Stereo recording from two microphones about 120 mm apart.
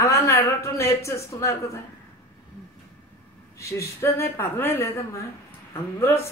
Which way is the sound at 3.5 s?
25° left (ahead or behind).